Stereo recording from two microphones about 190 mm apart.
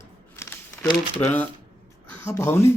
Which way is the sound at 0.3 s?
10° left (ahead or behind).